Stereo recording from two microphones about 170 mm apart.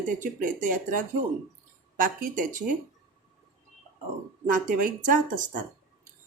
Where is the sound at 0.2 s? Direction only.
50° right (ahead or behind).